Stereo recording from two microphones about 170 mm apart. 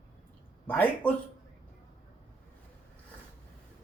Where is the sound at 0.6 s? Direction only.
10° left (ahead or behind).